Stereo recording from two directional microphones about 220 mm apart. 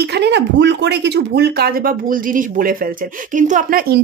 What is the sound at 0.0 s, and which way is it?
Speech, 50° right (ahead or behind).